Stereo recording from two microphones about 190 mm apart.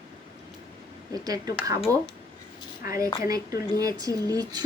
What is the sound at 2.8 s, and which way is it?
A woman's voice, 15° right (ahead or behind).